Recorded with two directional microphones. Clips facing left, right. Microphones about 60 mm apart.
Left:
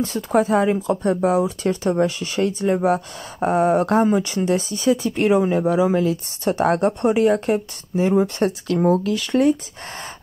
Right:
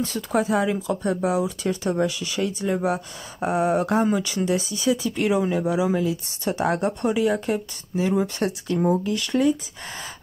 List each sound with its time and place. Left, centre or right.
0.0 s speech: left
4.0 s speech: left
8.6 s speech: left